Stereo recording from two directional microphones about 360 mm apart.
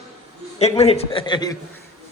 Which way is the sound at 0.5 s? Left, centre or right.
Centre.